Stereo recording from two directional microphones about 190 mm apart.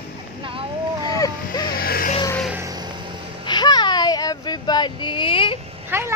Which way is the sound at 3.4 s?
25° left (ahead or behind).